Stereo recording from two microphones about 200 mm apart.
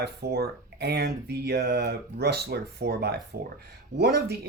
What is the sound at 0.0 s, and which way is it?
Speech, 55° right (ahead or behind).